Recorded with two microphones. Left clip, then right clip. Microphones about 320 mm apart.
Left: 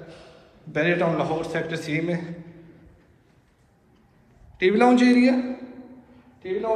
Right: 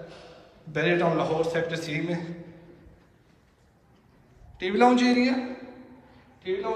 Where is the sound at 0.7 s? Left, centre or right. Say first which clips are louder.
Left 2 dB; centre.